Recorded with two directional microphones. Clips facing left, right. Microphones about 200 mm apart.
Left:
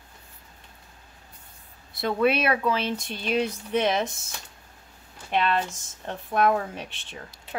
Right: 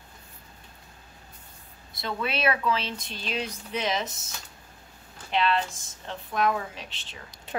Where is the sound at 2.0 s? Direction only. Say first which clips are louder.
Left 8 dB; 55° left (ahead or behind).